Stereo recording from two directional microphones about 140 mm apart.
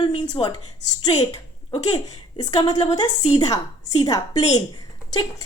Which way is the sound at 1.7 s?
30° left (ahead or behind).